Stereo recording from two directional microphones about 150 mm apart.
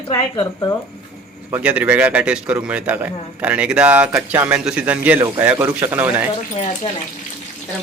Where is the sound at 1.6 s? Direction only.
10° right (ahead or behind).